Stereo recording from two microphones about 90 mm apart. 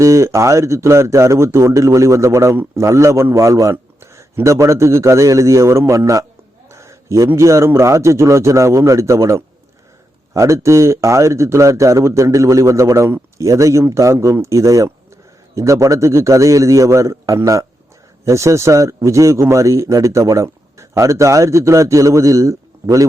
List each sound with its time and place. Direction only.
0.0 s a man's voice: 35° right (ahead or behind)
6.7 s a sound: 35° right (ahead or behind)
7.3 s a man's voice: 35° right (ahead or behind)